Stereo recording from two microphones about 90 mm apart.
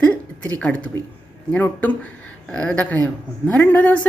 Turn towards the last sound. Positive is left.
turn(degrees=15)  # may be behind; listen again after turning